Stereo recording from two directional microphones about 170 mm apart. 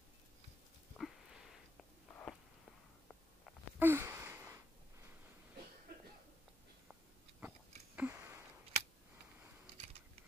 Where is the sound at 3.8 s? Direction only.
15° right (ahead or behind).